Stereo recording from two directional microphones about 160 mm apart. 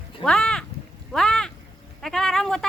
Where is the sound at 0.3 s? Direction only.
5° left (ahead or behind).